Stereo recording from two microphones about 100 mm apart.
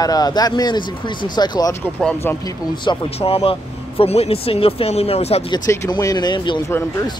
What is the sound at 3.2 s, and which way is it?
Speech, 80° left.